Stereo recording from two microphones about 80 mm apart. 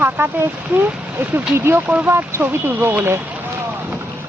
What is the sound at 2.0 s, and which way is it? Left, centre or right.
Speech, right.